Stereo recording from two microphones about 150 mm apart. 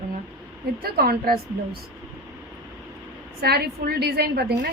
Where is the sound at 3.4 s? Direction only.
90° right.